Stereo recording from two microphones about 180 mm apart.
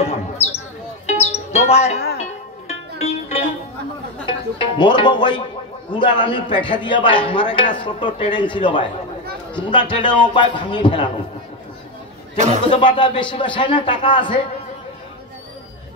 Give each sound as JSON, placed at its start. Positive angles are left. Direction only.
{"t": 0.0, "sound": "a sound", "side_deg": 35}
{"t": 1.2, "sound": "music", "side_deg": 35}
{"t": 3.0, "sound": "music", "side_deg": 35}
{"t": 4.3, "sound": "a man's voice", "side_deg": 25}
{"t": 12.6, "sound": "a man's voice", "side_deg": 25}